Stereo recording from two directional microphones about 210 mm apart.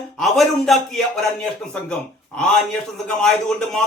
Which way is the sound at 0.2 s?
Centre (ahead or behind).